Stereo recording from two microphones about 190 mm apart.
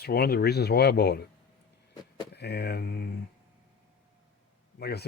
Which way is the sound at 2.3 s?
60° left (ahead or behind).